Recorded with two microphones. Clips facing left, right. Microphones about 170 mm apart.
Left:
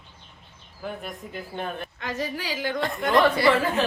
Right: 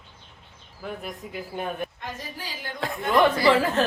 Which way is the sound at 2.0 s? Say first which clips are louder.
Left 6 dB; 85° left.